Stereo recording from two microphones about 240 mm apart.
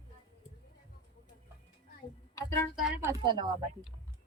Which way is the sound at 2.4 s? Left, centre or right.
Centre.